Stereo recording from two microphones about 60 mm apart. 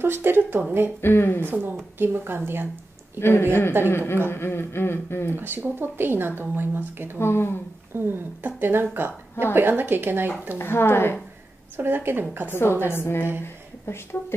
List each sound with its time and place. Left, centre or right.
0.0 s speech: right
1.0 s speech: left
1.4 s speech: right
3.2 s speech: left
5.3 s speech: right
7.2 s speech: left
7.9 s speech: right
10.6 s speech: left
11.7 s speech: right
12.4 s a woman's voice: left